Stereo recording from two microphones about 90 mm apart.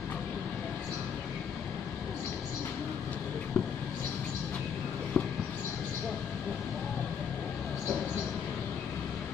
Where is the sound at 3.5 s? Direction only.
20° left (ahead or behind).